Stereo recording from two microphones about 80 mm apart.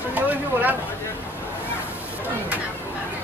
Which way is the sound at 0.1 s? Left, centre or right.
Right.